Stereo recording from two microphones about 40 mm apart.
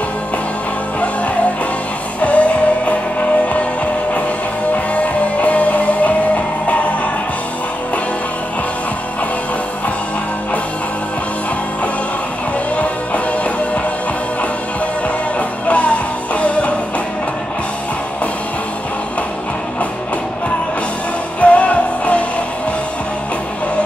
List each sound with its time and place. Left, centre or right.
2.2 s music: left
4.9 s music: left
12.7 s music: left
15.3 s music: left
21.4 s music: left